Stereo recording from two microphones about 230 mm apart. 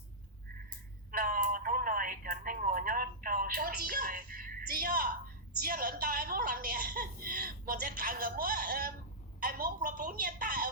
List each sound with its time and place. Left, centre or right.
1.1 s telephone: right
5.6 s a sound: right
9.4 s a woman's voice: right